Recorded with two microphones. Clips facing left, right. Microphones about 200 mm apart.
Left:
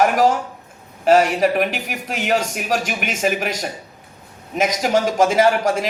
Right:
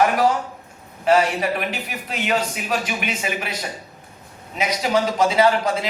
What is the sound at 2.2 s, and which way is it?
A man's voice, 45° left (ahead or behind).